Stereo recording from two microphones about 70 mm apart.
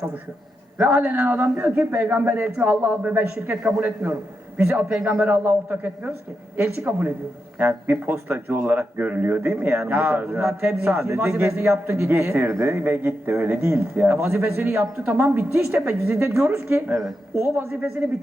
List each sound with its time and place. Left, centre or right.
0.8 s a man's voice: right
16.9 s speech: centre
17.3 s speech: right